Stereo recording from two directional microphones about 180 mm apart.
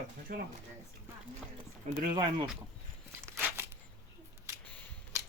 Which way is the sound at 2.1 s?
25° right (ahead or behind).